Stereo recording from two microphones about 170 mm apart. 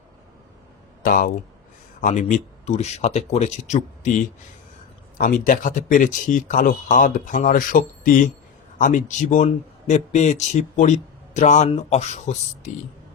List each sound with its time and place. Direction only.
1.0 s speech: 55° left (ahead or behind)
5.1 s speech: 55° left (ahead or behind)